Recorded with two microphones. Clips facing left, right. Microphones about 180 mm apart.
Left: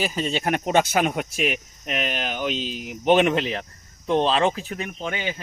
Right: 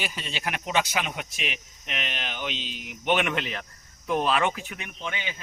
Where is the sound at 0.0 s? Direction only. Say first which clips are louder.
Left 8 dB; 40° left (ahead or behind).